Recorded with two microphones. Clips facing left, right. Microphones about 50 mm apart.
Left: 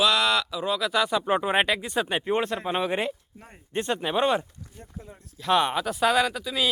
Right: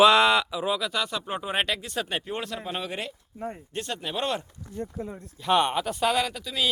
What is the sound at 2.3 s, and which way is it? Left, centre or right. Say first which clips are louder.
Speech: left 6 dB; left.